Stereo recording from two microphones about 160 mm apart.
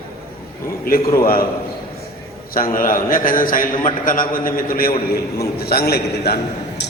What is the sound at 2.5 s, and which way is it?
A man's voice, 65° left (ahead or behind).